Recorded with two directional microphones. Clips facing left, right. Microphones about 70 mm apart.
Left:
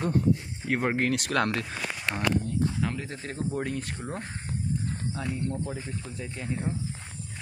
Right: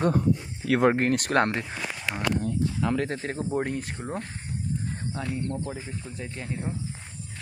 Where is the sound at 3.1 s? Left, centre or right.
Right.